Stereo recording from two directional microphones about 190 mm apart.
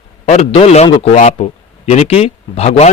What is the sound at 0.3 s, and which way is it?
Speech, 35° left (ahead or behind).